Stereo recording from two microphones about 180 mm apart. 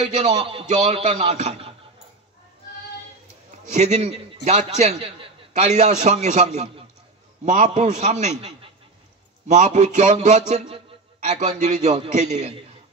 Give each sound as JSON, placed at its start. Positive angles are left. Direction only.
{"t": 0.0, "sound": "a man's voice", "side_deg": -35}
{"t": 3.7, "sound": "a man's voice", "side_deg": -40}
{"t": 9.5, "sound": "a man's voice", "side_deg": -40}